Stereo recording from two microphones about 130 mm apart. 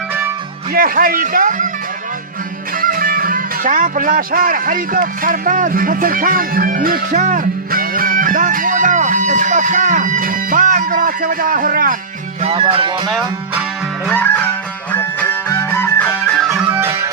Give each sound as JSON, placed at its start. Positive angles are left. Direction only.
{"t": 0.8, "sound": "speech", "side_deg": -90}
{"t": 2.8, "sound": "speech", "side_deg": -90}
{"t": 12.5, "sound": "music", "side_deg": -40}
{"t": 14.1, "sound": "music", "side_deg": 15}
{"t": 16.5, "sound": "music", "side_deg": -10}